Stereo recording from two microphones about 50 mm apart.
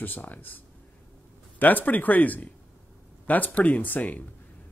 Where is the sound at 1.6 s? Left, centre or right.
Left.